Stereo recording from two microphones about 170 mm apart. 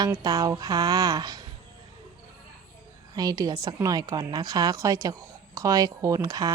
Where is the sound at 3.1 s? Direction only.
20° right (ahead or behind).